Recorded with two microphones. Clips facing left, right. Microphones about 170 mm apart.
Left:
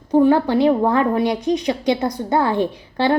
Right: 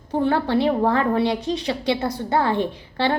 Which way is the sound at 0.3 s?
15° left (ahead or behind).